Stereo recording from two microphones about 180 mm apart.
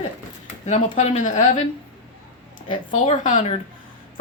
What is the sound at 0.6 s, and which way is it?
Speech, 35° left (ahead or behind).